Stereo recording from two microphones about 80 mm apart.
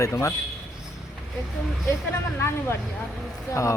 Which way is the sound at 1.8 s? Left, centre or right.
Left.